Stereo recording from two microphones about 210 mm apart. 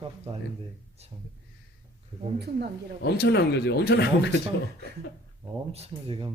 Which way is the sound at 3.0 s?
50° left (ahead or behind).